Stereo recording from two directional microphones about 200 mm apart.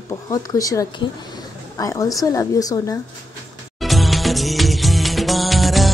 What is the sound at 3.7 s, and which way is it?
Music, centre (ahead or behind).